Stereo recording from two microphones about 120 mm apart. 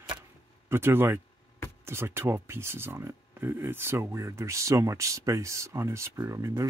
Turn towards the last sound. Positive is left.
turn(degrees=-25)  # may be behind; listen again after turning